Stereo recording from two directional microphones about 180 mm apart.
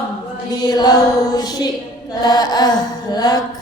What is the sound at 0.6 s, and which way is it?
Mantra, 20° left (ahead or behind).